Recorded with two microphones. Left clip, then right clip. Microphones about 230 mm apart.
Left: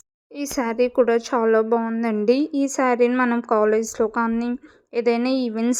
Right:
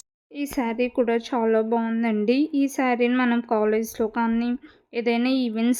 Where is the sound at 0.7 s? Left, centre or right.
Centre.